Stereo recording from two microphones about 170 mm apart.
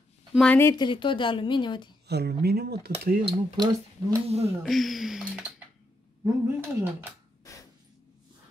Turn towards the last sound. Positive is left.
turn(degrees=20)  # may be behind; listen again after turning